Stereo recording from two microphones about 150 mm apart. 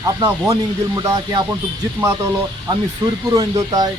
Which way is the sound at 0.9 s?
25° right (ahead or behind).